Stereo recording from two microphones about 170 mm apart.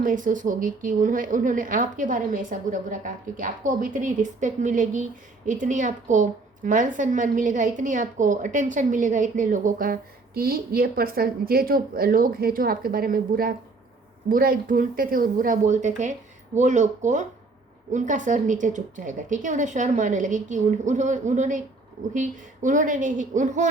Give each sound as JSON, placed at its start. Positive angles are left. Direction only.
{"t": 0.0, "sound": "a woman's voice", "side_deg": -50}